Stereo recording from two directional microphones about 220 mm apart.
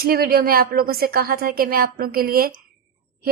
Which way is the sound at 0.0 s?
45° right (ahead or behind).